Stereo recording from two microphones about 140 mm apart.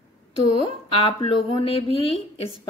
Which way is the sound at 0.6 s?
45° left (ahead or behind).